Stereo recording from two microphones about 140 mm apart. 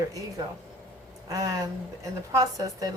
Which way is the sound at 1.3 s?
25° right (ahead or behind).